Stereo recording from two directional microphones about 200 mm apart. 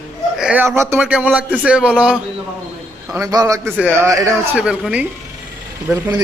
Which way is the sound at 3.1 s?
15° right (ahead or behind).